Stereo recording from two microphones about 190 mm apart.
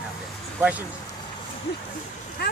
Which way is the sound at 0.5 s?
10° right (ahead or behind).